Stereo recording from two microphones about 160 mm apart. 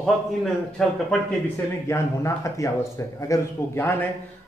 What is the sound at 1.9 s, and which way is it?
A man's voice, 20° left (ahead or behind).